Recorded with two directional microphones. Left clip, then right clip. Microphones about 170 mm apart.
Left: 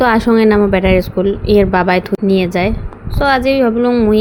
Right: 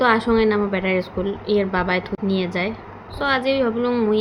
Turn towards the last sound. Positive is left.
turn(degrees=35)  # may be behind; listen again after turning